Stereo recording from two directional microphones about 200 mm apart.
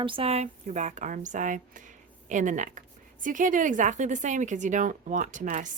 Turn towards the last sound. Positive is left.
turn(degrees=-40)  # may be behind; listen again after turning